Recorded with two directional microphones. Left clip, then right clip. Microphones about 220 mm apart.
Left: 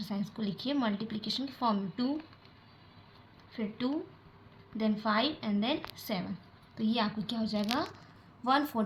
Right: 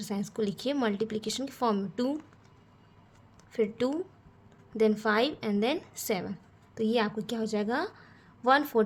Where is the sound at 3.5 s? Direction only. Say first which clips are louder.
Right 7 dB; 55° right (ahead or behind).